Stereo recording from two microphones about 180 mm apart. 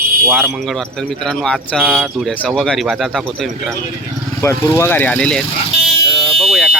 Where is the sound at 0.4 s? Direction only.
Centre (ahead or behind).